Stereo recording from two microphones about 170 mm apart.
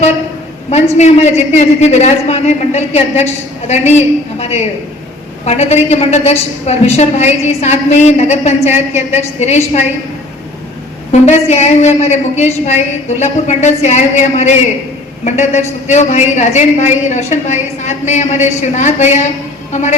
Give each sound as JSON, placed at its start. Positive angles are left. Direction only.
{"t": 0.7, "sound": "a woman's voice", "side_deg": 40}
{"t": 11.1, "sound": "a woman's voice", "side_deg": 40}